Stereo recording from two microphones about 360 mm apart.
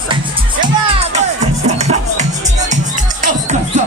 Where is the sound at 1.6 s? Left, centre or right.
Centre.